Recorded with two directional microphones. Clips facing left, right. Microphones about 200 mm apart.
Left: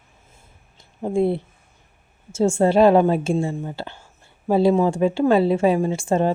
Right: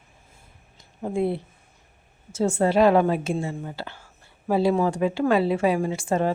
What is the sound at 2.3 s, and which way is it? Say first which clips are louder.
A woman's voice: left 4 dB; 25° left (ahead or behind).